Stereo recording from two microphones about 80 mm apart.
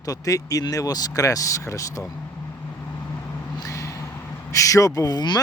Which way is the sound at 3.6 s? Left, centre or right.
Left.